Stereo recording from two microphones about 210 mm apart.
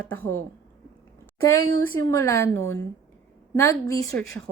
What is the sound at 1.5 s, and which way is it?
A woman's voice, 15° left (ahead or behind).